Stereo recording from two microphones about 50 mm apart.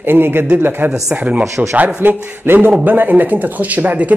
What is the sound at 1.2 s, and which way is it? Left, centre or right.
A woman's voice, right.